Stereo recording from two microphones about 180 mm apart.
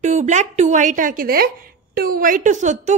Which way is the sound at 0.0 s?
40° right (ahead or behind).